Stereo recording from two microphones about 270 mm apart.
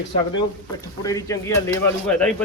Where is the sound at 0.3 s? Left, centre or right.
Centre.